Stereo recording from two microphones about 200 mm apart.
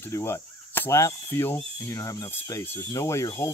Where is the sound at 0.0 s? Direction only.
10° left (ahead or behind).